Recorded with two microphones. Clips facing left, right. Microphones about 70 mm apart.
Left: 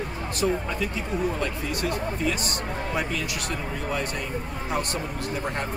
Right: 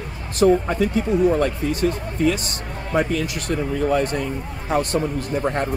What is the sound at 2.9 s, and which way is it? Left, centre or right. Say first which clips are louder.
Speech: right 10 dB; right.